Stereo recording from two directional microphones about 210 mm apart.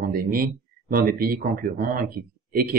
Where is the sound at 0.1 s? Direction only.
45° right (ahead or behind).